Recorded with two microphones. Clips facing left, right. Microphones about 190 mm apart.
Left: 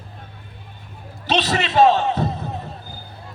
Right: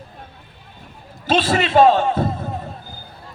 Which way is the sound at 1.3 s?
45° right (ahead or behind).